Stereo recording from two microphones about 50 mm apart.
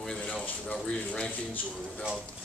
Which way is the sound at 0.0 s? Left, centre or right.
Centre.